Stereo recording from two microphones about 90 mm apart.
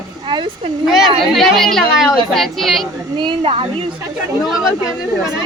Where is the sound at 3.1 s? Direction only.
75° right (ahead or behind).